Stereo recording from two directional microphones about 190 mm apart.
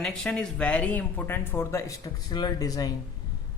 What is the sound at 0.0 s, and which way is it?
Speech, 5° left (ahead or behind).